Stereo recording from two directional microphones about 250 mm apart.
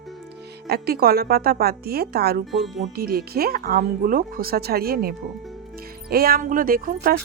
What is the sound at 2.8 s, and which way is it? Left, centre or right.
Speech, right.